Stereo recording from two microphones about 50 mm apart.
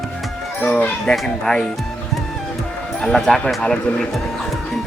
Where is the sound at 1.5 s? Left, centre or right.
Centre.